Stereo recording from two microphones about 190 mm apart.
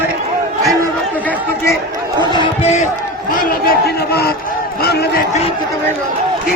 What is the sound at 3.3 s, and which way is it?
Speech, 50° left (ahead or behind).